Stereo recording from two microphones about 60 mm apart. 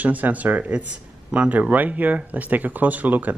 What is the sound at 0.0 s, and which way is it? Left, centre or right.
Speech, right.